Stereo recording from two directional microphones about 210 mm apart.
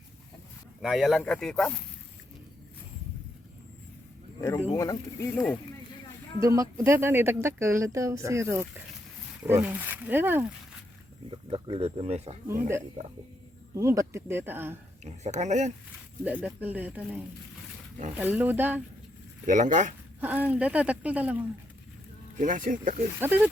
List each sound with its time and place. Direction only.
0.8 s speech: centre (ahead or behind)
4.4 s speech: 10° left (ahead or behind)
6.6 s speech: 15° right (ahead or behind)
11.3 s speech: 25° right (ahead or behind)
13.7 s speech: 15° right (ahead or behind)
15.0 s speech: 35° right (ahead or behind)
16.2 s speech: 10° right (ahead or behind)
19.5 s speech: 35° right (ahead or behind)
20.2 s speech: 10° right (ahead or behind)
22.4 s speech: 40° right (ahead or behind)
23.2 s speech: 10° right (ahead or behind)